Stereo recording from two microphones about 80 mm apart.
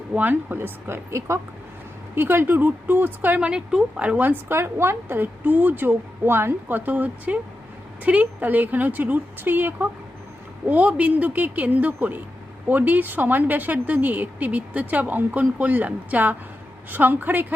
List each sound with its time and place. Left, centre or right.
0.2 s speech: right